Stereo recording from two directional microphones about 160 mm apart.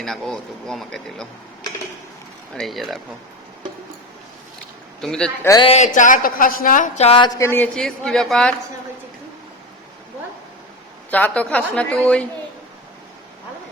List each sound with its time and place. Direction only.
0.0 s speech: centre (ahead or behind)
2.6 s speech: centre (ahead or behind)
4.9 s speech: 5° left (ahead or behind)
5.6 s speech: 45° left (ahead or behind)
7.3 s a woman's voice: 15° left (ahead or behind)
7.8 s speech: 5° left (ahead or behind)
11.1 s a woman's voice: 10° left (ahead or behind)